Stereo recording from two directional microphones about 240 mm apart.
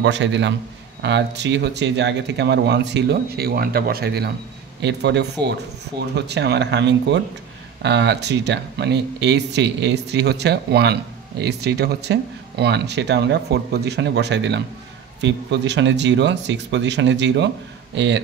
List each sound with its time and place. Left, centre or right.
0.0 s speech: right